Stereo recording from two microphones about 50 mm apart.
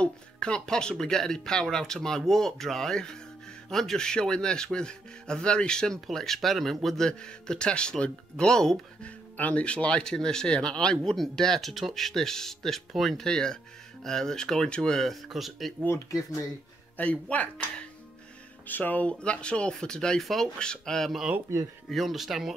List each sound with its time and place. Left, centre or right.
0.0 s speech: centre
5.9 s speech: centre
7.1 s speech: centre
13.3 s speech: centre
15.2 s speech: centre
16.9 s speech: left
19.0 s speech: left
20.2 s speech: centre
20.5 s speech: centre
21.9 s speech: centre